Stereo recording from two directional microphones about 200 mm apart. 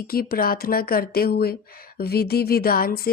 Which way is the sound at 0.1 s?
50° left (ahead or behind).